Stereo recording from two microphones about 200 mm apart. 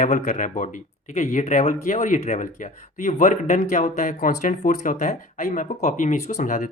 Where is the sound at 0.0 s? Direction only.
40° left (ahead or behind).